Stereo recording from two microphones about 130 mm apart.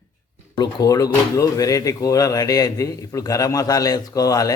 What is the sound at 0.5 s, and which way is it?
Speech, 30° left (ahead or behind).